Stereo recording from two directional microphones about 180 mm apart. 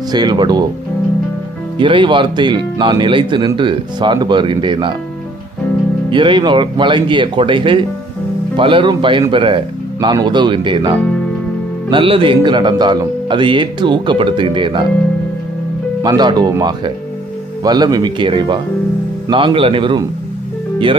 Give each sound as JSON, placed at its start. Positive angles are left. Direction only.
{"t": 0.1, "sound": "speech", "side_deg": -25}
{"t": 1.8, "sound": "speech", "side_deg": -25}
{"t": 6.0, "sound": "speech", "side_deg": -25}
{"t": 16.0, "sound": "speech", "side_deg": -25}